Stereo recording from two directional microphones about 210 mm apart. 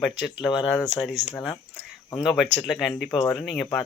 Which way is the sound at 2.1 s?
Centre (ahead or behind).